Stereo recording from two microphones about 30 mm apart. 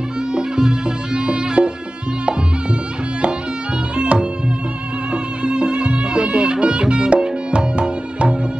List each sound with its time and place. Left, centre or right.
0.3 s music: right
3.9 s music: right